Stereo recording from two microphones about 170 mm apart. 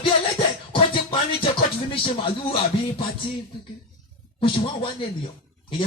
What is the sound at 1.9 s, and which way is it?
Speech, 30° left (ahead or behind).